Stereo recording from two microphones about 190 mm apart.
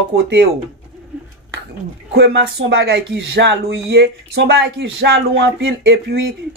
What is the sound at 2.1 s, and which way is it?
Speech, 60° right (ahead or behind).